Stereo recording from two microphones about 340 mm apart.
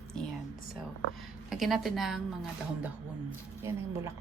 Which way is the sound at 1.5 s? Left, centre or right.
Centre.